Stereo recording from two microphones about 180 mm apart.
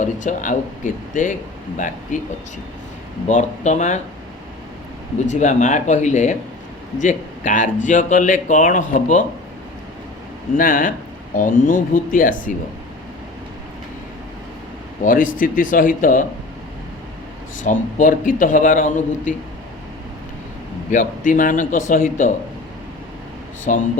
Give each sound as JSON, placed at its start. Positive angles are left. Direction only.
{"t": 0.0, "sound": "speech", "side_deg": 45}
{"t": 5.2, "sound": "speech", "side_deg": 40}
{"t": 10.6, "sound": "speech", "side_deg": 50}
{"t": 15.0, "sound": "speech", "side_deg": 50}
{"t": 17.7, "sound": "speech", "side_deg": 45}
{"t": 20.9, "sound": "speech", "side_deg": 45}
{"t": 23.7, "sound": "speech", "side_deg": 45}